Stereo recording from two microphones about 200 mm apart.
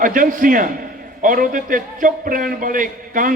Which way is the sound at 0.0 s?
45° right (ahead or behind).